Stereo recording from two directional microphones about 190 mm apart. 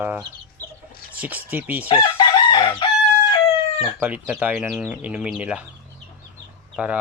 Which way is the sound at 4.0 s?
10° right (ahead or behind).